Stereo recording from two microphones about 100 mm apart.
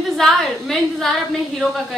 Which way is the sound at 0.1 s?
5° left (ahead or behind).